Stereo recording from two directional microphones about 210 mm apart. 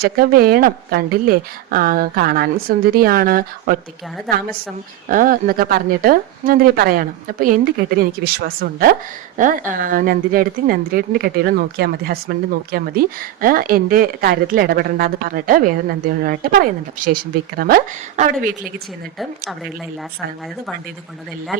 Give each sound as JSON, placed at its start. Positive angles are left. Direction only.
{"t": 0.0, "sound": "speech", "side_deg": -45}
{"t": 5.0, "sound": "speech", "side_deg": -40}